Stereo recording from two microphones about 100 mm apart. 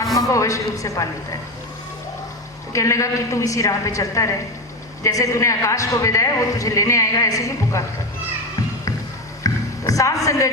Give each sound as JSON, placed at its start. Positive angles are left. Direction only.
{"t": 0.2, "sound": "a man's voice", "side_deg": 35}
{"t": 2.7, "sound": "a man's voice", "side_deg": 30}
{"t": 9.4, "sound": "music", "side_deg": 35}